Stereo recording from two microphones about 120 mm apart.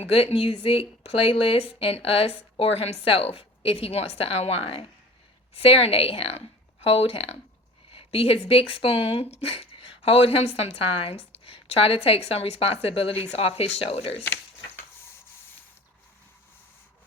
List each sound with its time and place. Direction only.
0.0 s a woman's voice: 55° left (ahead or behind)